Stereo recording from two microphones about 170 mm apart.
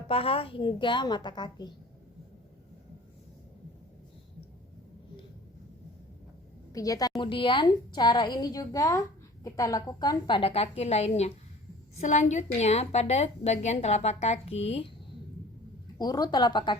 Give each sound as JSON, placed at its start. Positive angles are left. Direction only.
{"t": 0.1, "sound": "a woman's voice", "side_deg": 35}
{"t": 6.7, "sound": "a woman's voice", "side_deg": 20}
{"t": 16.0, "sound": "a woman's voice", "side_deg": 25}